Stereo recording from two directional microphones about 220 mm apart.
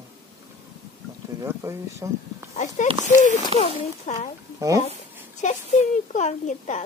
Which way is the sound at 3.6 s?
30° left (ahead or behind).